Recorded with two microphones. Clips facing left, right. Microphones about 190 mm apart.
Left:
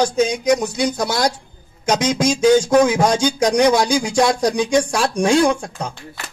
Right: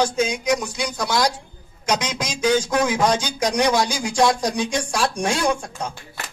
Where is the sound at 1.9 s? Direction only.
45° left (ahead or behind).